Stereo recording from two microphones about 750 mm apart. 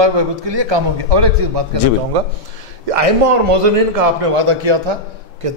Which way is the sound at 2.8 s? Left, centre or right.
Right.